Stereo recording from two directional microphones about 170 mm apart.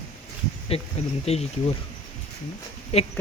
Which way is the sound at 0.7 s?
35° left (ahead or behind).